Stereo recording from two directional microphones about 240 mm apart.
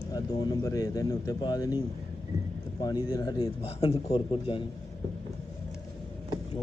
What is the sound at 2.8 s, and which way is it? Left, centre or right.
Speech, centre.